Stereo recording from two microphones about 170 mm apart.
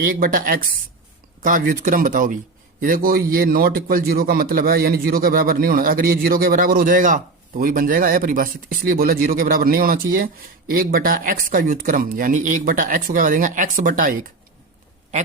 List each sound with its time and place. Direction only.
0.0 s a man's voice: 55° right (ahead or behind)